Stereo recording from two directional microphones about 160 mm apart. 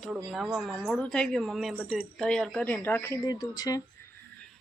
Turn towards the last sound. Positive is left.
turn(degrees=20)  # may be behind; listen again after turning